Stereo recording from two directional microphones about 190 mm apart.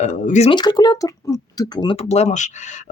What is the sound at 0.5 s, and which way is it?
Speech, 20° left (ahead or behind).